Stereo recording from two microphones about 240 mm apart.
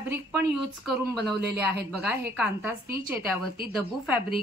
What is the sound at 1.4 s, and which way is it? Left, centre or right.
Speech, right.